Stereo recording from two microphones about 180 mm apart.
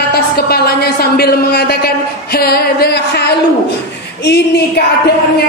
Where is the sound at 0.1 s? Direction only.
60° left (ahead or behind).